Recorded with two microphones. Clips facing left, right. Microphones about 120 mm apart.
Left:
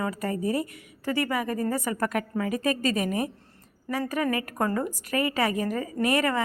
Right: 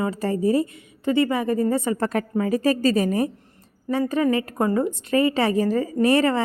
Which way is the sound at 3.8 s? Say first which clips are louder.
Right 6 dB; 20° right (ahead or behind).